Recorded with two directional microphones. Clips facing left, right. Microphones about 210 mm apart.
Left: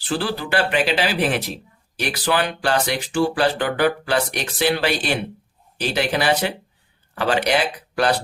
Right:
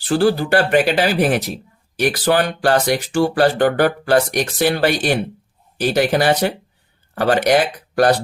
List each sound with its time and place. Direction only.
0.1 s speech: 45° right (ahead or behind)